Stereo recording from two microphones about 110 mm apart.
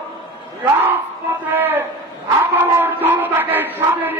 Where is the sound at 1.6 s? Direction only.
15° right (ahead or behind).